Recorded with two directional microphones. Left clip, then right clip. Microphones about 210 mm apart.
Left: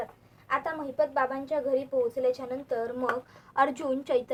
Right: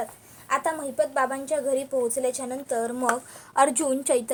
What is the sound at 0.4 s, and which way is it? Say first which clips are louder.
A woman's voice: right 4 dB; 50° right (ahead or behind).